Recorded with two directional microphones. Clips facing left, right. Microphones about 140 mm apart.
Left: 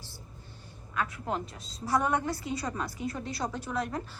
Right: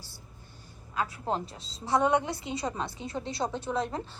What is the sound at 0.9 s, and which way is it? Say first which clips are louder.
A woman's voice: right 2 dB; 30° right (ahead or behind).